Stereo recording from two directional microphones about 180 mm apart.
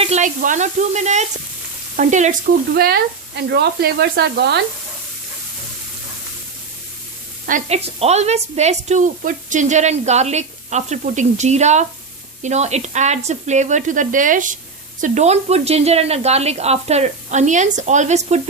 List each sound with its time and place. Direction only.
0.0 s a woman's voice: 40° right (ahead or behind)
2.0 s sizzle: 40° right (ahead or behind)
2.7 s speech: 60° right (ahead or behind)
7.4 s speech: 45° right (ahead or behind)
7.9 s a woman's voice: 35° right (ahead or behind)